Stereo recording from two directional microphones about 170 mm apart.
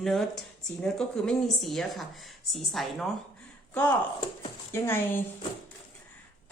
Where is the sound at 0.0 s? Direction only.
Centre (ahead or behind).